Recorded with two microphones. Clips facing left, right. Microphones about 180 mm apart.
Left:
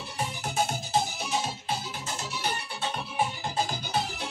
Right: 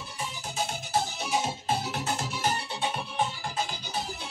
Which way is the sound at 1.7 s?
55° right (ahead or behind).